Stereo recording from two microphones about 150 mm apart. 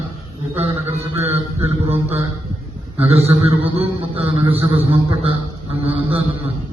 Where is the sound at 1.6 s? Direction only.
40° right (ahead or behind).